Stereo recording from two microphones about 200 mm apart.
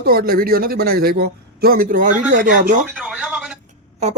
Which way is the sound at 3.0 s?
5° right (ahead or behind).